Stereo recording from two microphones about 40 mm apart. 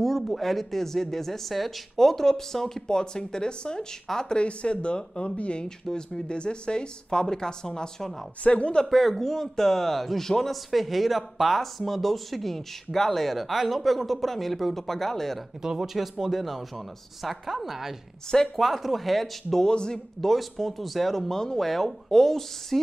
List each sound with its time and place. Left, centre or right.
0.0 s speech: centre
8.5 s speech: left
8.8 s a man's voice: centre
15.6 s a man's voice: centre
19.6 s speech: centre
20.2 s a man's voice: centre
21.4 s speech: centre